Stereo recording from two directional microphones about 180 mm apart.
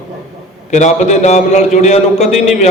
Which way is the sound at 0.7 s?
40° left (ahead or behind).